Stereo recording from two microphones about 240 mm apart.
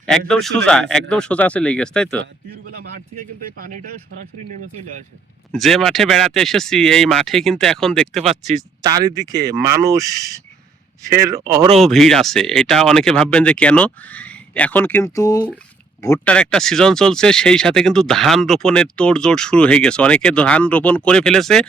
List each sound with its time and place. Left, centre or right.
0.3 s speech: centre
5.5 s speech: centre
8.8 s speech: centre
11.8 s speech: centre